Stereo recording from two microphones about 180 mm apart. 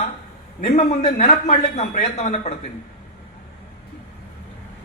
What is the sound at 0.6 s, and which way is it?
Speech, 50° left (ahead or behind).